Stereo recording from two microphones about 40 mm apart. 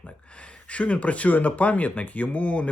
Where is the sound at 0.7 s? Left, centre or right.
Left.